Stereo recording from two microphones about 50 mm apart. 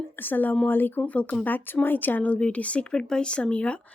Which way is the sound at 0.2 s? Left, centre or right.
Left.